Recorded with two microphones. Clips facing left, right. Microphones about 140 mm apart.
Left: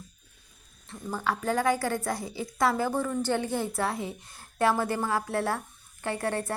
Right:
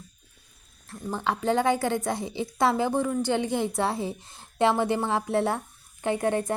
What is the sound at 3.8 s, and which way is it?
A woman's voice, 30° right (ahead or behind).